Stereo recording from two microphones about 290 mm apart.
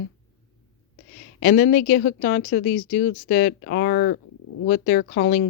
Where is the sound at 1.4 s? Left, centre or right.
Left.